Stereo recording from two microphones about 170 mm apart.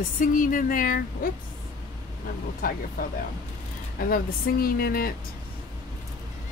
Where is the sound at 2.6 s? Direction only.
55° left (ahead or behind).